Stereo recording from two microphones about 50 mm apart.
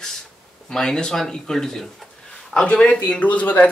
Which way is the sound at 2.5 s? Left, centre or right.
Centre.